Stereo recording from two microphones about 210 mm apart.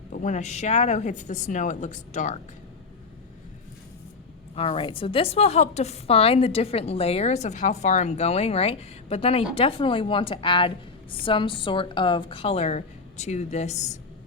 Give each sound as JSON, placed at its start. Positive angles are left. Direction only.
{"t": 0.1, "sound": "speech", "side_deg": 35}
{"t": 4.5, "sound": "a woman's voice", "side_deg": 25}